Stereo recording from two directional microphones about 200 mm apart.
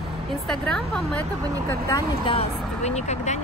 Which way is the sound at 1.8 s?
20° left (ahead or behind).